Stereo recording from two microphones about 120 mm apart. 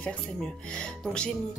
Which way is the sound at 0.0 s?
5° left (ahead or behind).